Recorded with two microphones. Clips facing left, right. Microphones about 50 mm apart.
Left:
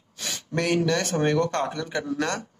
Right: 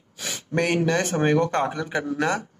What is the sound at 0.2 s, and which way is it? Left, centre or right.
Speech, centre.